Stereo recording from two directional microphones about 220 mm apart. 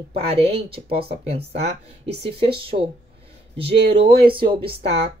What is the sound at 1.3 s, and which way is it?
Speech, 25° right (ahead or behind).